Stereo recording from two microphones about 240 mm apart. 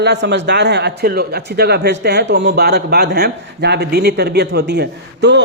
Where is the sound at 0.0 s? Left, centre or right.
Right.